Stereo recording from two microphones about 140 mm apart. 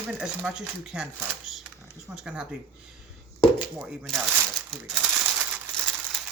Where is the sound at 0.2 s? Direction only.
5° right (ahead or behind).